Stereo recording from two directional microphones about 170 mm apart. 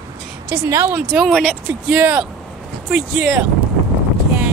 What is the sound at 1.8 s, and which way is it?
A woman's voice, 5° right (ahead or behind).